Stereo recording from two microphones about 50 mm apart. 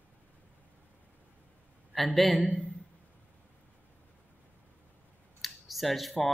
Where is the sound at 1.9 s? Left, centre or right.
Centre.